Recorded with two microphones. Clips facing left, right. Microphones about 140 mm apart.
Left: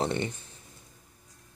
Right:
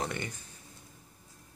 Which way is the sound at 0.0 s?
25° left (ahead or behind).